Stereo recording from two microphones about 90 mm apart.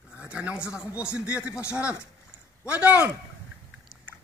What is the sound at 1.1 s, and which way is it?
A man's voice, 15° right (ahead or behind).